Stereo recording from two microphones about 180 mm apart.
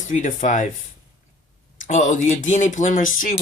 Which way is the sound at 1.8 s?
45° left (ahead or behind).